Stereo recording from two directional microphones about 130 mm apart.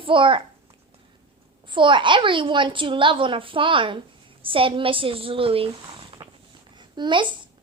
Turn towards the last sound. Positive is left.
turn(degrees=-35)  # may be behind; listen again after turning